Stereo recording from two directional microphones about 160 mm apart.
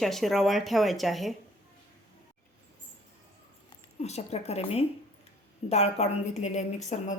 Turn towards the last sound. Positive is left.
turn(degrees=45)  # may be behind; listen again after turning